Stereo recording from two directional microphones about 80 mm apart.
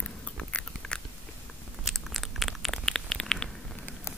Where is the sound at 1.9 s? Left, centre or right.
Centre.